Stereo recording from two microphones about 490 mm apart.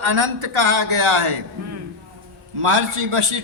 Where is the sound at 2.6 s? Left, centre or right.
Right.